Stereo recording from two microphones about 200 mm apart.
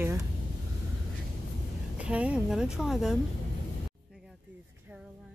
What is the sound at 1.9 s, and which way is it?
A woman's voice, 5° right (ahead or behind).